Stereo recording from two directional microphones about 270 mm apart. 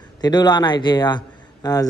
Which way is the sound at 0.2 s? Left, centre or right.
Centre.